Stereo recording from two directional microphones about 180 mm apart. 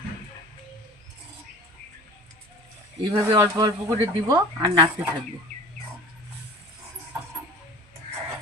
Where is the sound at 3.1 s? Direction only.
20° right (ahead or behind).